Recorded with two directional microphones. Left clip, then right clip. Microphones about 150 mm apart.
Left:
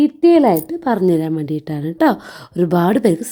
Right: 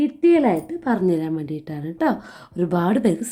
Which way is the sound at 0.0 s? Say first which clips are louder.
Left 5 dB; 65° left (ahead or behind).